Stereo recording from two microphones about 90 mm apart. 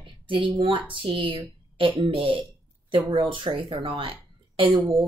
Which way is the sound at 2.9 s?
70° right (ahead or behind).